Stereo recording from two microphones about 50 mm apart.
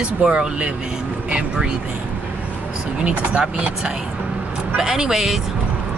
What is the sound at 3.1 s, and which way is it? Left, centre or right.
Speech, right.